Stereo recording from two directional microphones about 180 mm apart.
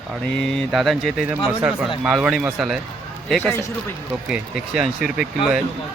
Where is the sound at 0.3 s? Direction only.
5° left (ahead or behind).